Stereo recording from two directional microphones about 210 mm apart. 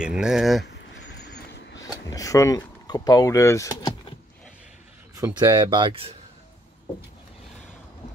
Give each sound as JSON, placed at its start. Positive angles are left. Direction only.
{"t": 0.0, "sound": "speech", "side_deg": -5}
{"t": 0.7, "sound": "a sound", "side_deg": 50}
{"t": 1.8, "sound": "speech", "side_deg": 15}
{"t": 5.1, "sound": "speech", "side_deg": -15}